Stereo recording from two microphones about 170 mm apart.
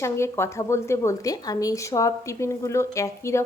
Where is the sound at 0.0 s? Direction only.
15° left (ahead or behind).